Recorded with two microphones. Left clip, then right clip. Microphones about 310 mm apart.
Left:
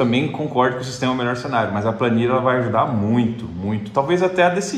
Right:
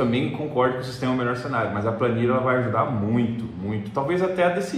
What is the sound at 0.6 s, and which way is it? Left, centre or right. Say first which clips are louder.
A man's voice: left 4 dB; left.